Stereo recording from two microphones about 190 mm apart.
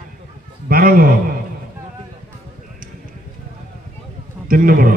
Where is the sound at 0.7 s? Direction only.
50° right (ahead or behind).